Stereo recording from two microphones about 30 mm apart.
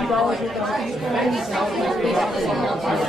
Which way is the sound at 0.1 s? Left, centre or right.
Centre.